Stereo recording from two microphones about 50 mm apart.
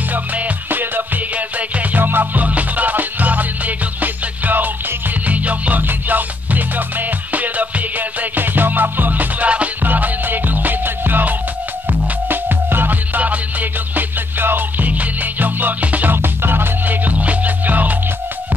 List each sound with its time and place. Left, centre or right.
0.1 s music: right
13.2 s music: right
16.2 s music: right